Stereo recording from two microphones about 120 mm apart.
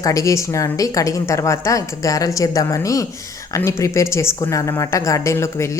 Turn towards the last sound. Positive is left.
turn(degrees=25)  # may be behind; listen again after turning